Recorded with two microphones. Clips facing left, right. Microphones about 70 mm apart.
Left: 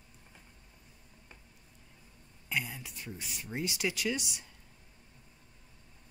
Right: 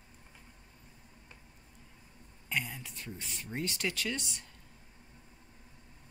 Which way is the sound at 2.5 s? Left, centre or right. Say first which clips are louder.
Even; centre.